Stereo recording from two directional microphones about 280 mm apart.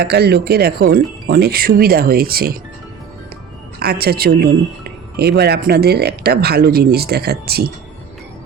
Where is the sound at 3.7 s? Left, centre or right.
Right.